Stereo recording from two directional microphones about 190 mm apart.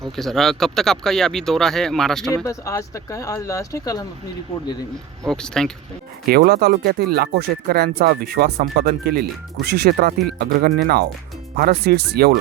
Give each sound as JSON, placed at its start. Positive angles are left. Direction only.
{"t": 0.0, "sound": "speech", "side_deg": 0}
{"t": 2.3, "sound": "speech", "side_deg": 15}
{"t": 5.2, "sound": "speech", "side_deg": 5}
{"t": 6.2, "sound": "speech", "side_deg": -50}